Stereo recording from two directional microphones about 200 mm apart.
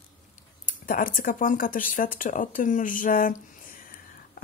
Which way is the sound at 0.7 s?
45° left (ahead or behind).